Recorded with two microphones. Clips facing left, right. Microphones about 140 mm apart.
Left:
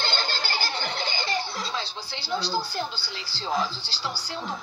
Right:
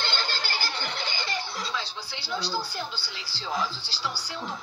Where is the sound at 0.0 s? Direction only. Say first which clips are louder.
Left 2 dB; 30° left (ahead or behind).